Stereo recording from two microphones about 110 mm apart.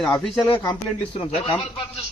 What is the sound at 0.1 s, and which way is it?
Speech, 15° left (ahead or behind).